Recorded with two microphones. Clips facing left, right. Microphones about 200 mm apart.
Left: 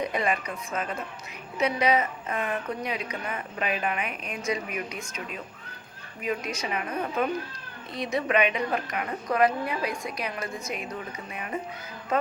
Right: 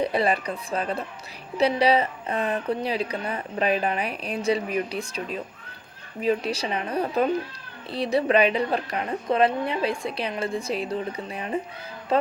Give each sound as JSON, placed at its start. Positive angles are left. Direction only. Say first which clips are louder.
{"t": 0.0, "sound": "a woman's voice", "louder": "right 4 dB", "side_deg": -35}